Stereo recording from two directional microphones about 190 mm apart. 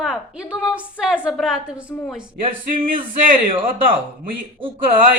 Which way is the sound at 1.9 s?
5° left (ahead or behind).